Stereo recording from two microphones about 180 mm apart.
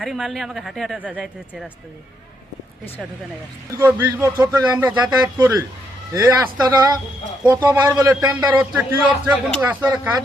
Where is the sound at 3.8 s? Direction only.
10° right (ahead or behind).